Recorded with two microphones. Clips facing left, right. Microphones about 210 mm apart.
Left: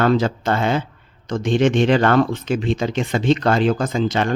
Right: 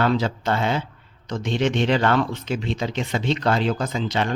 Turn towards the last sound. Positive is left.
turn(degrees=45)  # may be behind; listen again after turning